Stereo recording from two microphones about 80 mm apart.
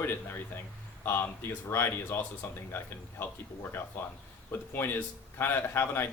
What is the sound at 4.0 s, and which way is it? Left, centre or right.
Speech, left.